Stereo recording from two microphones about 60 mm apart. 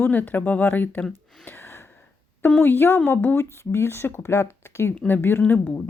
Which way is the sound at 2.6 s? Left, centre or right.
Left.